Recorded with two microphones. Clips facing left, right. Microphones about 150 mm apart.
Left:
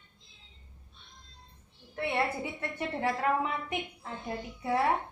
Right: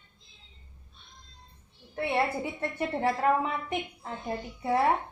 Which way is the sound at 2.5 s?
35° right (ahead or behind).